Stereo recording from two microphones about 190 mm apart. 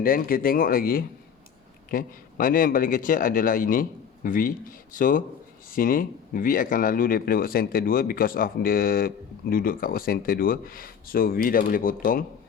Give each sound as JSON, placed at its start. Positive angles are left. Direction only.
{"t": 0.0, "sound": "speech", "side_deg": 50}